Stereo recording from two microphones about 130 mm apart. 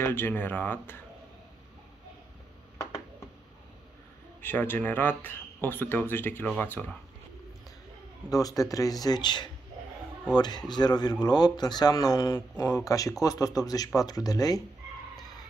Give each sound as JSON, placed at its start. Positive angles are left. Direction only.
{"t": 0.0, "sound": "speech", "side_deg": 15}
{"t": 4.4, "sound": "speech", "side_deg": 15}
{"t": 6.4, "sound": "speech", "side_deg": 5}
{"t": 8.3, "sound": "speech", "side_deg": 30}